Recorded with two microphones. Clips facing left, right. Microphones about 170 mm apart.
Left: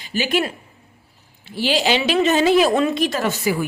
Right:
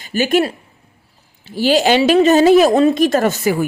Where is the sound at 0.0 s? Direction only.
45° right (ahead or behind).